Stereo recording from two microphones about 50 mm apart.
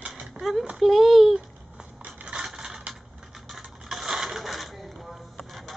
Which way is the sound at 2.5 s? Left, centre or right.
Centre.